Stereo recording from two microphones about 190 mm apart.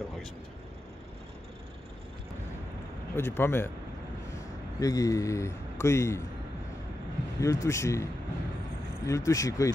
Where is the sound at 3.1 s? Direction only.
10° left (ahead or behind).